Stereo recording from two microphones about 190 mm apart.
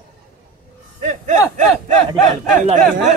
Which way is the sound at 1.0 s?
40° right (ahead or behind).